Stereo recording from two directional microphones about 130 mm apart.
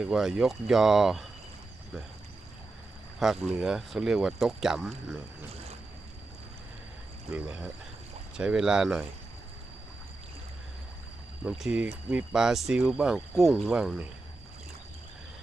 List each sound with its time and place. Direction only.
0.0 s speech: 5° right (ahead or behind)
3.2 s speech: centre (ahead or behind)
7.3 s speech: 5° right (ahead or behind)
11.4 s speech: 5° right (ahead or behind)